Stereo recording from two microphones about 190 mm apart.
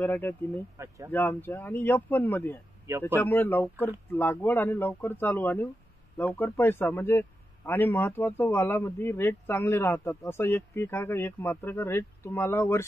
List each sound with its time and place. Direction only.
0.0 s a man's voice: 10° left (ahead or behind)
0.7 s speech: 15° right (ahead or behind)
1.1 s a man's voice: 10° left (ahead or behind)